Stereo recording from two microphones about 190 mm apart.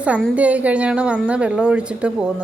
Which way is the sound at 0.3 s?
5° right (ahead or behind).